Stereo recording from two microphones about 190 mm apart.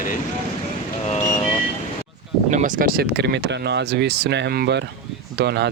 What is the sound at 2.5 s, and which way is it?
Speech, 45° right (ahead or behind).